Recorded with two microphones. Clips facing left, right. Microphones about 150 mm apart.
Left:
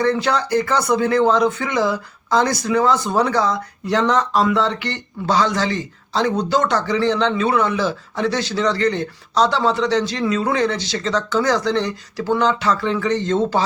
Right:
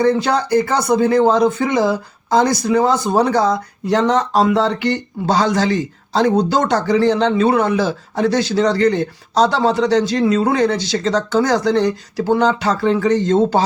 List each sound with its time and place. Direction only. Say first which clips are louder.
0.1 s speech: right 3 dB; 40° right (ahead or behind)
0.9 s speech: right 5 dB; 25° right (ahead or behind)
1.2 s speech: right 3 dB; 40° right (ahead or behind)
2.4 s speech: right 4 dB; 20° right (ahead or behind)
2.8 s speech: right 2 dB; 40° right (ahead or behind)